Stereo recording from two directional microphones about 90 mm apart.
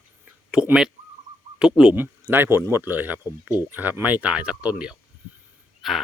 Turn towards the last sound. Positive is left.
turn(degrees=0)  # may be behind; listen again after turning